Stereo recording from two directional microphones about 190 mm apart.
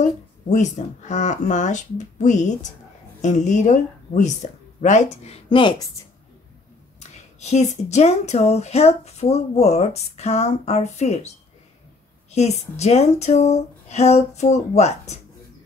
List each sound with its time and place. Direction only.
0.0 s speech: 40° left (ahead or behind)
7.0 s speech: 35° left (ahead or behind)
12.4 s speech: 35° left (ahead or behind)